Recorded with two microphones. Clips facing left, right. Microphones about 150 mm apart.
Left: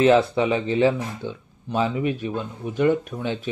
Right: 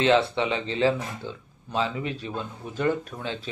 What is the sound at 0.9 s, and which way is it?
Speech, 15° left (ahead or behind).